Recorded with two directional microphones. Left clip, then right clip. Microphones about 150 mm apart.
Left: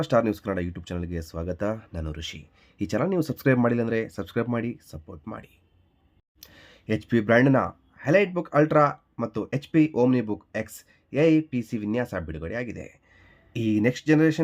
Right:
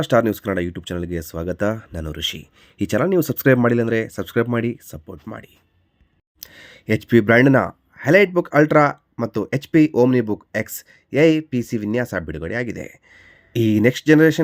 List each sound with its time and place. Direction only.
0.0 s speech: 25° right (ahead or behind)